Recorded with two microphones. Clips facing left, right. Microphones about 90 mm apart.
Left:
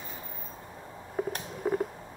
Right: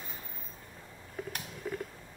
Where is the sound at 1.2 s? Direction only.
40° left (ahead or behind).